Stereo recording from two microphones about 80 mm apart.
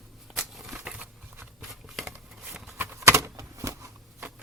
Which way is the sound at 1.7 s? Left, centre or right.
Centre.